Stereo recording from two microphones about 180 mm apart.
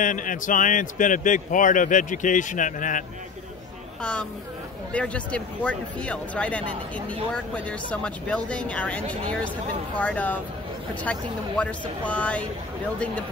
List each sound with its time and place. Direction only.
0.0 s a man's voice: 45° left (ahead or behind)
4.0 s a woman's voice: 5° left (ahead or behind)